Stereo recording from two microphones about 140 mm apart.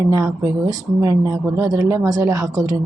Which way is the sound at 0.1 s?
25° right (ahead or behind).